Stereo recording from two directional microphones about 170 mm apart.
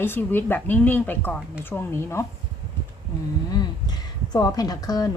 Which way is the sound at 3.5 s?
25° left (ahead or behind).